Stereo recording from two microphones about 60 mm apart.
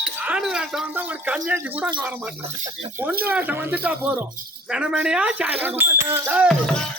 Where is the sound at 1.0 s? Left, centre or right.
Right.